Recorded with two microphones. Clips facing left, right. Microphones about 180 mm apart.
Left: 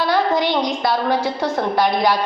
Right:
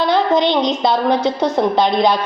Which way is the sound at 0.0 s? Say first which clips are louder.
Right 3 dB; 20° right (ahead or behind).